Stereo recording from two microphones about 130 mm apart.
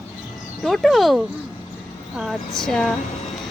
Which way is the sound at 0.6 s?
Centre (ahead or behind).